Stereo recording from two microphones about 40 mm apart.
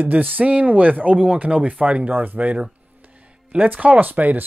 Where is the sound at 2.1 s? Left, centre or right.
Right.